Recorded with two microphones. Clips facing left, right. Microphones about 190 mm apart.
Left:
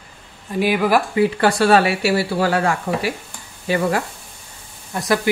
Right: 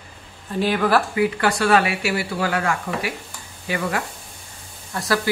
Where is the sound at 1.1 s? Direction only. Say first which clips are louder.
Left 4 dB; 30° left (ahead or behind).